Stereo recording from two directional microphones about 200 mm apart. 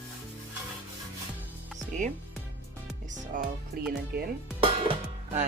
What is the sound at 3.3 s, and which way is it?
Music, 40° right (ahead or behind).